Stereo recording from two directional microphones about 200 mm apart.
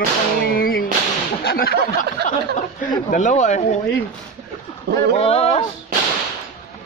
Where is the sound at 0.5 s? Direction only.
50° left (ahead or behind).